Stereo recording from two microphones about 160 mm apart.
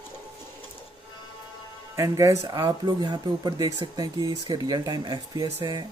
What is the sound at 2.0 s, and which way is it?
Speech, 20° right (ahead or behind).